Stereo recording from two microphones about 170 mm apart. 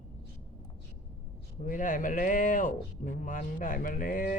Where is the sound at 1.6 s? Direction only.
50° left (ahead or behind).